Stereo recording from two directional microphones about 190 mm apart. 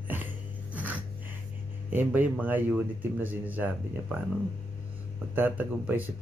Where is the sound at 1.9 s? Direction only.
10° right (ahead or behind).